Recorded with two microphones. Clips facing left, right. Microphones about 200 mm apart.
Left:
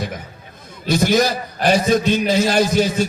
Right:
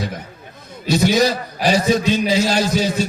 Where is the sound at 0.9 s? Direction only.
55° left (ahead or behind).